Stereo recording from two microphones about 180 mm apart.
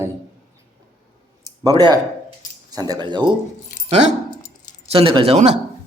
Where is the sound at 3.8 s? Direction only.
35° right (ahead or behind).